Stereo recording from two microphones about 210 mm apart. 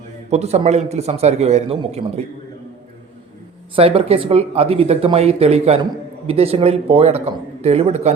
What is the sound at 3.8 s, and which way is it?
A man's voice, 25° right (ahead or behind).